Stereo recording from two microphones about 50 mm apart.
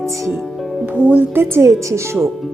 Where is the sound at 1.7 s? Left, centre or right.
Right.